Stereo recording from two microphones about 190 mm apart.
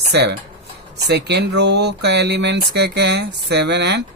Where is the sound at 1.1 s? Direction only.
60° right (ahead or behind).